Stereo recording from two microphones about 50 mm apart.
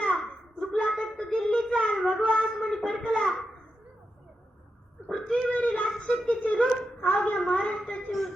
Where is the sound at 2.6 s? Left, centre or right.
Centre.